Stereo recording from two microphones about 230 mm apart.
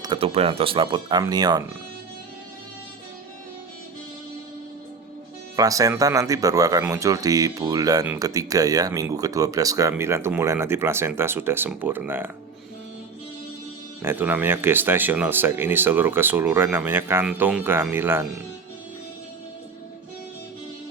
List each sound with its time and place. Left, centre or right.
0.0 s speech: right
5.5 s speech: centre
14.0 s speech: centre